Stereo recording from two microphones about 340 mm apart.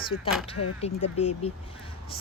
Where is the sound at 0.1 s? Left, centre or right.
Left.